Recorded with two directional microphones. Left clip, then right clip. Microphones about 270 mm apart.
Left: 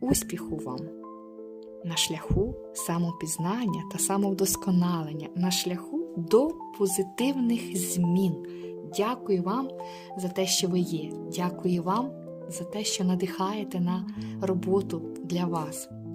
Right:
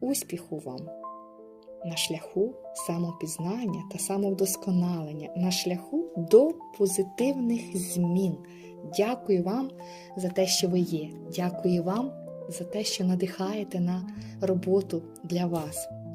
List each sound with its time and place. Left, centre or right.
1.8 s speech: centre
9.0 s speech: centre